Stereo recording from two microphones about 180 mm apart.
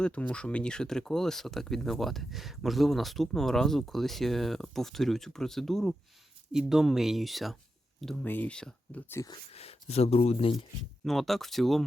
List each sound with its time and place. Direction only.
0.0 s speech: 5° left (ahead or behind)
9.3 s speech: 35° left (ahead or behind)
11.0 s speech: centre (ahead or behind)